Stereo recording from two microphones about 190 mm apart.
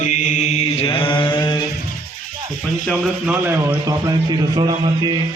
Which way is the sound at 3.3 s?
10° right (ahead or behind).